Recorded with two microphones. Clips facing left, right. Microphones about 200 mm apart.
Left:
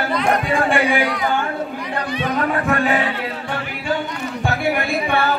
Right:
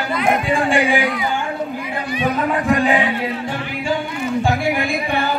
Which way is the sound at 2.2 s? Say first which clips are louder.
Right 2 dB; 15° right (ahead or behind).